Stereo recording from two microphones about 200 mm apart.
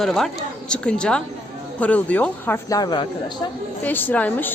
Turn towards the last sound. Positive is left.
turn(degrees=10)  # may be behind; listen again after turning